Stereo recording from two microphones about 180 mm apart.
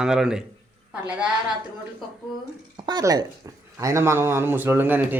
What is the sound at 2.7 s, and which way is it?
Speech, 25° right (ahead or behind).